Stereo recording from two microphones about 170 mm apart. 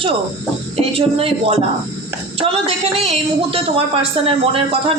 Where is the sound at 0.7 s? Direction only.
35° right (ahead or behind).